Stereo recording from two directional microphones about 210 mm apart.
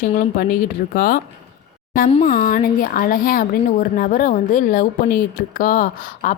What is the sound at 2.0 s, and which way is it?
Speech, 35° left (ahead or behind).